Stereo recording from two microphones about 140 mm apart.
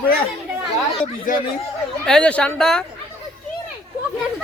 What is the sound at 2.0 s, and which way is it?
Speech, 5° left (ahead or behind).